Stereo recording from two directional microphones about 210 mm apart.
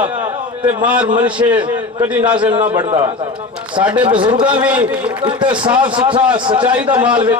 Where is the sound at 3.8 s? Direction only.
5° right (ahead or behind).